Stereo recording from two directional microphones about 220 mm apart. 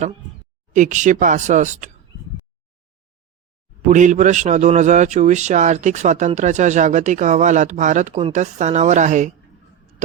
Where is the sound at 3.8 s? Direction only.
35° right (ahead or behind).